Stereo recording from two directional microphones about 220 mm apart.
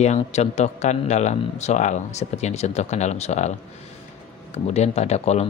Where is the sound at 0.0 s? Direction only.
30° left (ahead or behind).